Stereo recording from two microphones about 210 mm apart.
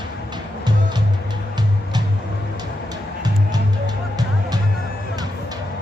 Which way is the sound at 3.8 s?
20° right (ahead or behind).